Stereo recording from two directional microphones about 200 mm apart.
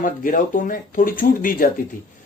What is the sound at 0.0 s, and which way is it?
Speech, 40° left (ahead or behind).